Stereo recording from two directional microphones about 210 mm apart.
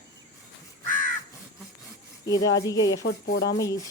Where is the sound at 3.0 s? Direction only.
50° left (ahead or behind).